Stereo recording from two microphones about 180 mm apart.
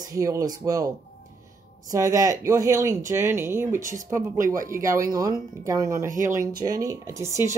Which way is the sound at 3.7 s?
45° right (ahead or behind).